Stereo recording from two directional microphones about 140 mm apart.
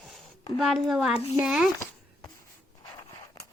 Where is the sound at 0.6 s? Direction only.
Centre (ahead or behind).